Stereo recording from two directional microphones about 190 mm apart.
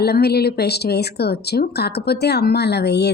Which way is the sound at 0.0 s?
55° left (ahead or behind).